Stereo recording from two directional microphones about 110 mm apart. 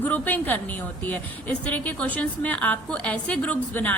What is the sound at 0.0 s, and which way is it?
A woman's voice, 15° left (ahead or behind).